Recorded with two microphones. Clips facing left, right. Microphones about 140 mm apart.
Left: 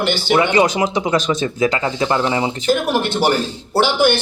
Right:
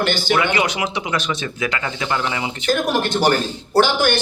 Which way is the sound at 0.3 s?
30° left (ahead or behind).